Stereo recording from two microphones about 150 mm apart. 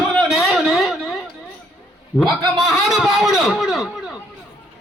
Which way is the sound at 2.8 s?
Centre (ahead or behind).